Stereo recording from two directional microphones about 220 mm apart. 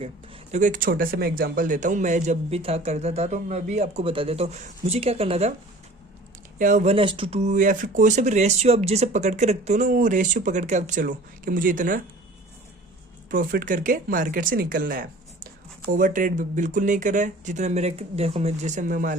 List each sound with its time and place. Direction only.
0.0 s speech: 30° right (ahead or behind)
6.6 s speech: 35° right (ahead or behind)
13.3 s speech: 40° right (ahead or behind)